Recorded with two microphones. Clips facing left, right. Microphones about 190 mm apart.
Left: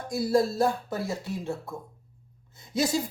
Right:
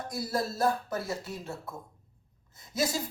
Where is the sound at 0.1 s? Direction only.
25° left (ahead or behind).